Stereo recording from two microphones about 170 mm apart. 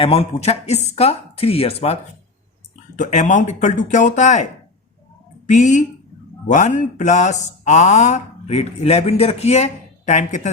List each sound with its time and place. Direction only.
0.0 s speech: 35° left (ahead or behind)
5.5 s speech: 45° left (ahead or behind)